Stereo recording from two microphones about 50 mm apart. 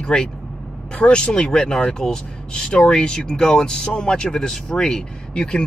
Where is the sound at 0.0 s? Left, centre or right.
Centre.